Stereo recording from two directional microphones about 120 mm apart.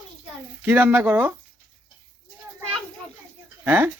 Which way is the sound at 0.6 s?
15° right (ahead or behind).